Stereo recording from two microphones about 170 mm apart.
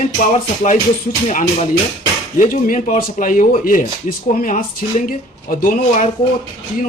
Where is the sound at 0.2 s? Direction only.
45° left (ahead or behind).